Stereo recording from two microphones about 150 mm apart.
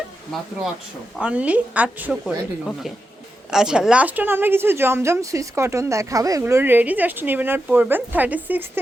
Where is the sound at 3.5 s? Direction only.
5° right (ahead or behind).